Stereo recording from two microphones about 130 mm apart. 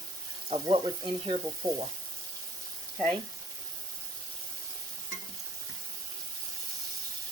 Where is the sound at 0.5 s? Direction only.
45° right (ahead or behind).